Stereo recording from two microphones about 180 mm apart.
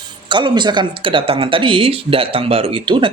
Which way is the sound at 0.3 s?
25° right (ahead or behind).